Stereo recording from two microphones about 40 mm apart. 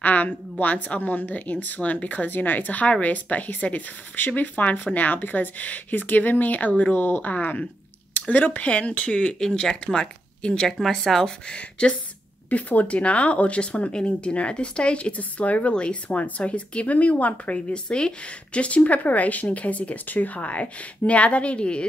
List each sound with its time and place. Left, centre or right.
0.0 s a woman's voice: left
8.6 s speech: left
9.4 s speech: centre
10.7 s speech: centre
11.4 s speech: left
12.4 s a woman's voice: left
17.8 s a woman's voice: left
20.3 s a woman's voice: left